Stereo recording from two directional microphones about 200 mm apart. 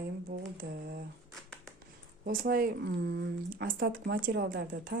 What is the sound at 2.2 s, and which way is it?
Speech, 45° right (ahead or behind).